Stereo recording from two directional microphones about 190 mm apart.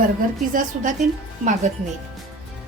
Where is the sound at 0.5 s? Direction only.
40° right (ahead or behind).